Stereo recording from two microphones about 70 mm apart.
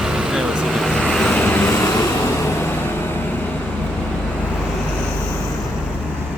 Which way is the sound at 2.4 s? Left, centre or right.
Left.